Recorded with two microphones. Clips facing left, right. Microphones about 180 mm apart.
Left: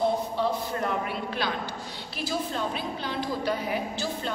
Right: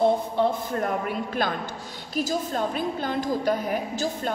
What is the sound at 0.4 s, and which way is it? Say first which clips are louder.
A man's voice: right 4 dB; 50° right (ahead or behind).